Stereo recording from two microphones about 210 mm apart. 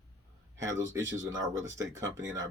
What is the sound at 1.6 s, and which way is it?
Speech, 65° right (ahead or behind).